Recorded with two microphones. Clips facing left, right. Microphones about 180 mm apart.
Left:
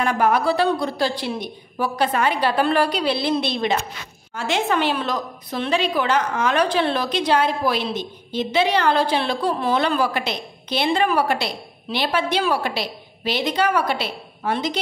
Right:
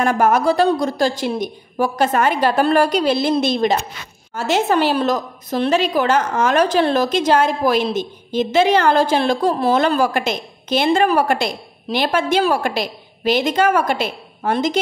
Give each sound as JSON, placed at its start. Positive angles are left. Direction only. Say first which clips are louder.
{"t": 0.0, "sound": "a woman's voice", "louder": "right 4 dB", "side_deg": -45}